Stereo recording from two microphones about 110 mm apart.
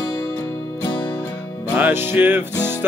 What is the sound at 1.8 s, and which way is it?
Music, 20° right (ahead or behind).